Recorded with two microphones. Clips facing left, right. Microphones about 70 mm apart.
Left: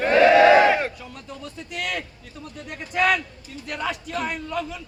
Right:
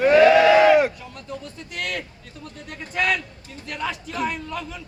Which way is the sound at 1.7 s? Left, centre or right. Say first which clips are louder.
Even; centre.